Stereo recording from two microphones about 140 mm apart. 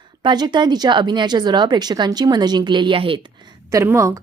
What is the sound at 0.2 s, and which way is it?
Speech, 30° right (ahead or behind).